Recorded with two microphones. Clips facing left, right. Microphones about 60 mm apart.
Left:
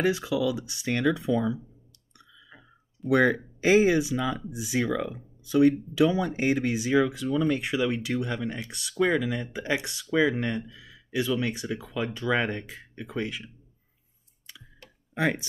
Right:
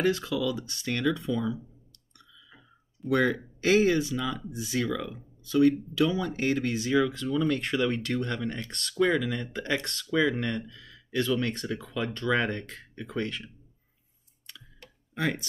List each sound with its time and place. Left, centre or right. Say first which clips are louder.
0.0 s speech: left 2 dB; centre
3.1 s speech: left 3 dB; centre
15.1 s speech: left 3 dB; centre